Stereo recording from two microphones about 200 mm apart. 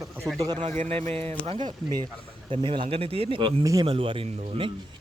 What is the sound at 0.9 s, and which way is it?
Speech, 10° left (ahead or behind).